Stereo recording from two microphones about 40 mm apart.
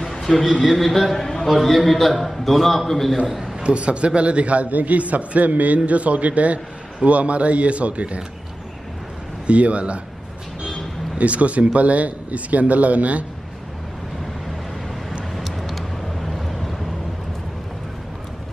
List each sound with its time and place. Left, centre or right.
0.0 s a sound: centre
0.7 s a man's voice: centre
3.6 s a man's voice: right
9.5 s a man's voice: right
11.1 s a man's voice: right
15.3 s vehicle: centre